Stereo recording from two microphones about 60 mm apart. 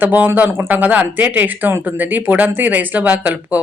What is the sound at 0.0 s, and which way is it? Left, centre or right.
Speech, right.